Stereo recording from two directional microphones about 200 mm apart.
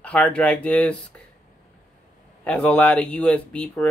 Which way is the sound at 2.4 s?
5° left (ahead or behind).